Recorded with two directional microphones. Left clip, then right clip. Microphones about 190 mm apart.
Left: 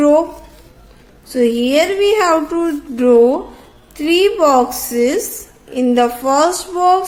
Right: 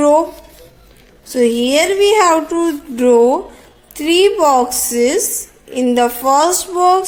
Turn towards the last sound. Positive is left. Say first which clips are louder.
# right 1 dB
turn(degrees=-25)  # may be behind; listen again after turning